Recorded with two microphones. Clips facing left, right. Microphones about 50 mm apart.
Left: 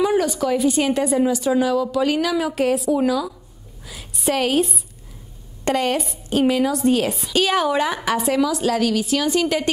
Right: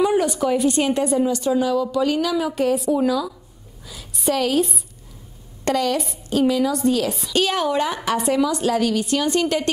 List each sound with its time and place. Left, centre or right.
0.0 s a woman's voice: centre
3.0 s a woman's voice: centre
3.8 s a sound: left
4.3 s speech: left
5.7 s a woman's voice: centre
6.3 s a woman's voice: left
7.3 s a woman's voice: centre